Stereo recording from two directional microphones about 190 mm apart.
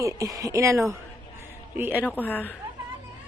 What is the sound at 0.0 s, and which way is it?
A woman's voice, 15° right (ahead or behind).